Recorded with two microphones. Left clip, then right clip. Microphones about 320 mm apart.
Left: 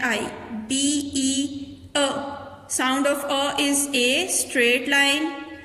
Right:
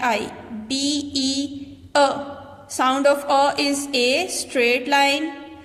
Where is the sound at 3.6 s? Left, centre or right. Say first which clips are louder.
Right 1 dB; centre.